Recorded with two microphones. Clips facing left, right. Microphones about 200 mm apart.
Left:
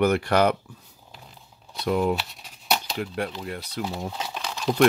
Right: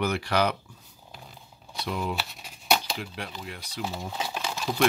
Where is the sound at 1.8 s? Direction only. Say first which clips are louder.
Left 8 dB; 55° left (ahead or behind).